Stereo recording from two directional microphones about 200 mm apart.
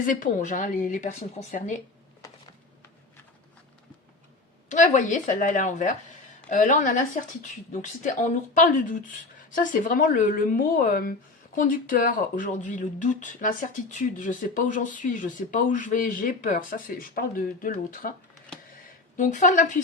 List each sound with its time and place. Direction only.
0.0 s speech: 40° left (ahead or behind)
4.7 s a woman's voice: 40° left (ahead or behind)
19.1 s speech: 40° left (ahead or behind)